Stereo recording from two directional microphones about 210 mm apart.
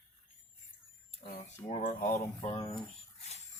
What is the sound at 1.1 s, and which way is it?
Speech, 30° left (ahead or behind).